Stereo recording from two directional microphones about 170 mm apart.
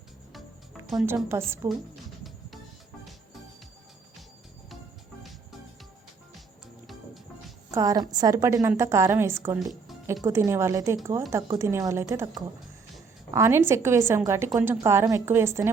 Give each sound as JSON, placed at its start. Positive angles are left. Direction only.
{"t": 0.3, "sound": "cricket", "side_deg": 0}
{"t": 0.9, "sound": "a woman's voice", "side_deg": -15}
{"t": 7.7, "sound": "a woman's voice", "side_deg": -20}